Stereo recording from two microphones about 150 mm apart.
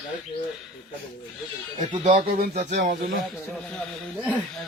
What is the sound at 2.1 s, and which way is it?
Speech, 70° right (ahead or behind).